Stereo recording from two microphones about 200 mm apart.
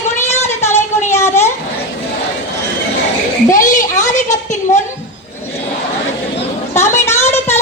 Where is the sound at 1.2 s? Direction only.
15° left (ahead or behind).